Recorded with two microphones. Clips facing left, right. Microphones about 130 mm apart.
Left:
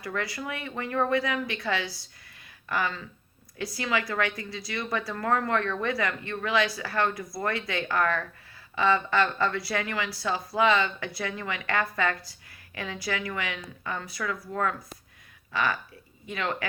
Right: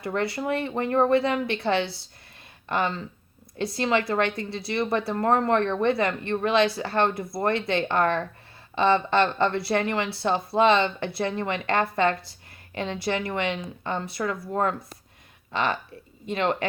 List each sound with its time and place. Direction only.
0.0 s speech: 25° right (ahead or behind)